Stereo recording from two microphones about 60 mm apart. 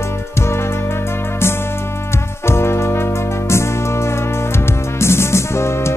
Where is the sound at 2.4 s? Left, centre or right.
Left.